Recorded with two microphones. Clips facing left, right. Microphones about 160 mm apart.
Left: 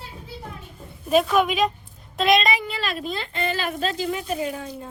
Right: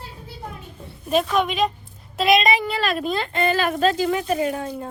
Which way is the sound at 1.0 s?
5° left (ahead or behind).